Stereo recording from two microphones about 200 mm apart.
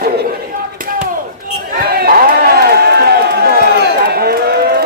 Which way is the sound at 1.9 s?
50° right (ahead or behind).